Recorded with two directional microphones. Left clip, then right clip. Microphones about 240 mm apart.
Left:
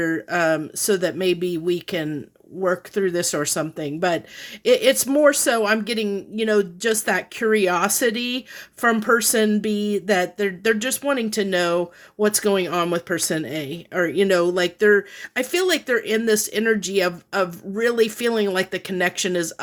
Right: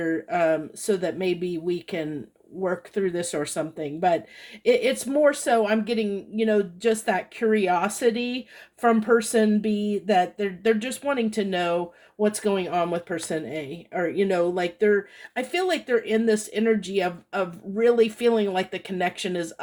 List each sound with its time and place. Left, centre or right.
0.0 s speech: left